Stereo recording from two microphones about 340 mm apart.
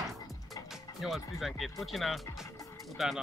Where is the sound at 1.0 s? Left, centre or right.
Centre.